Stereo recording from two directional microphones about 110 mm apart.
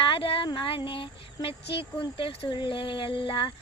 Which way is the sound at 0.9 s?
50° left (ahead or behind).